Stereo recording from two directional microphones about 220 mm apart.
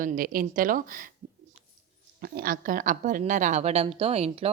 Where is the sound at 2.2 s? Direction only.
40° right (ahead or behind).